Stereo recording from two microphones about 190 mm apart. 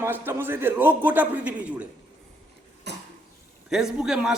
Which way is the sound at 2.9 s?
60° right (ahead or behind).